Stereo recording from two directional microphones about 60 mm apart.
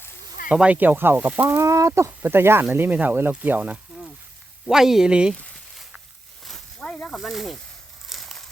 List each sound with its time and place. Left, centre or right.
0.4 s speech: centre
0.8 s speech: right
1.5 s speech: right
2.0 s speech: right
2.7 s speech: right
4.7 s speech: centre
6.4 s a sound: centre
6.8 s speech: centre
8.0 s a sound: centre